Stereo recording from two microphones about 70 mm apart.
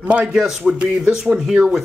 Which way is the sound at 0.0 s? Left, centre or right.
Centre.